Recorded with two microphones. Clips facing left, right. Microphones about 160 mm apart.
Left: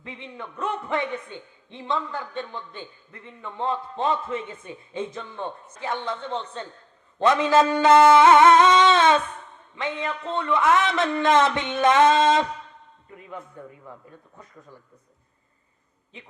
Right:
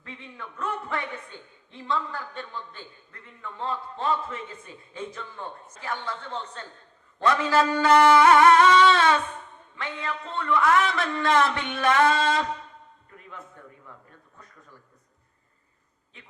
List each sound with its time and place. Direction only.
0.0 s a man's voice: 20° left (ahead or behind)
16.1 s a man's voice: 20° left (ahead or behind)